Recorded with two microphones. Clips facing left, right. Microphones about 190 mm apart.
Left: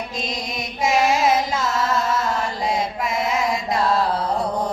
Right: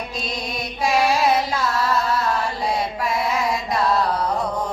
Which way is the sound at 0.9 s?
20° left (ahead or behind).